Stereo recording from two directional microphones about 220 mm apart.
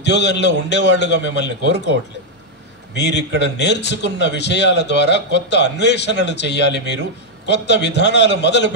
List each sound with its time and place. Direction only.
0.0 s a man's voice: 50° left (ahead or behind)
2.9 s a man's voice: 50° left (ahead or behind)